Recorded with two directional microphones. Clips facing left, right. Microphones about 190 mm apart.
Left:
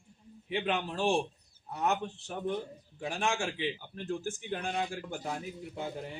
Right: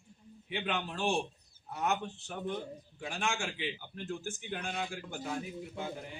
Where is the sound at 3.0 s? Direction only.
35° left (ahead or behind).